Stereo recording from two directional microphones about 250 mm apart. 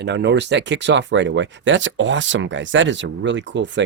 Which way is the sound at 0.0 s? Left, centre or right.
Right.